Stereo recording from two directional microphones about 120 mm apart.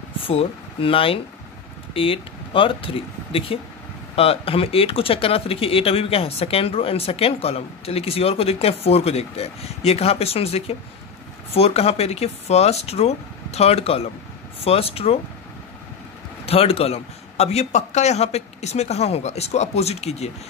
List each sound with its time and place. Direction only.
0.2 s speech: 50° left (ahead or behind)
16.4 s speech: 55° left (ahead or behind)